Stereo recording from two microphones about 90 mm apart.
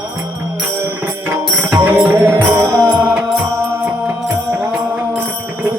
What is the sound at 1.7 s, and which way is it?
Music, 25° right (ahead or behind).